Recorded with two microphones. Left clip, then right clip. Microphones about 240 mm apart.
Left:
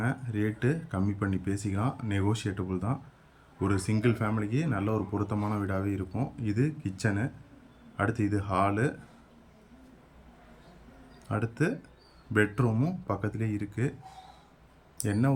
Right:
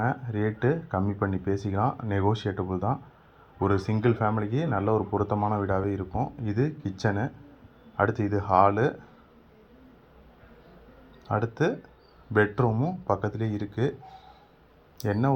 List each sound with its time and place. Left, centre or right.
0.0 s speech: centre
11.3 s speech: left
15.0 s speech: centre